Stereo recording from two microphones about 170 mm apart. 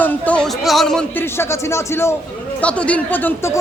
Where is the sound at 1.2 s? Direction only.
15° left (ahead or behind).